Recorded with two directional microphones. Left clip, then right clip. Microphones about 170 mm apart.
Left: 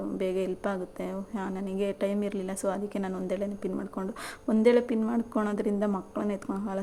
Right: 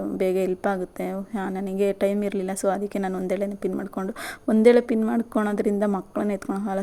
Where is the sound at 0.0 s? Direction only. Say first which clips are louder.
Right 6 dB; 35° right (ahead or behind).